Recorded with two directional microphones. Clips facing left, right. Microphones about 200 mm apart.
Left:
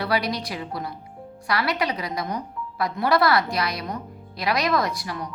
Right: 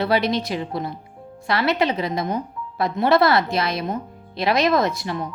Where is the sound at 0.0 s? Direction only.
25° right (ahead or behind).